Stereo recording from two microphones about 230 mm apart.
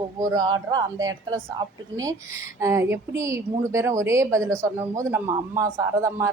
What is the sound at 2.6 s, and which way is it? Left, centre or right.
A woman's voice, centre.